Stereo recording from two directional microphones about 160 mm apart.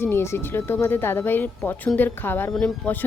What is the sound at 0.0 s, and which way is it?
Speech, 15° left (ahead or behind).